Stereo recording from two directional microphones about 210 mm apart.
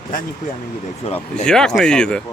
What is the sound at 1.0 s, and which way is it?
Speech, 30° left (ahead or behind).